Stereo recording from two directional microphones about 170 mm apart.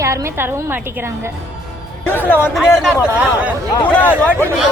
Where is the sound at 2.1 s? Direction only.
10° left (ahead or behind).